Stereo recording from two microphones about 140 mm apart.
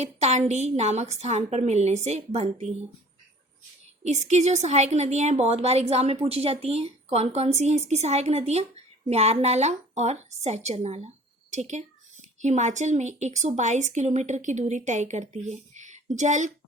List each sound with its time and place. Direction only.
0.0 s speech: 50° right (ahead or behind)
4.0 s a woman's voice: 55° right (ahead or behind)